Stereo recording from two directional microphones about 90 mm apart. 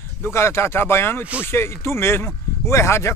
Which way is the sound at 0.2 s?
30° left (ahead or behind).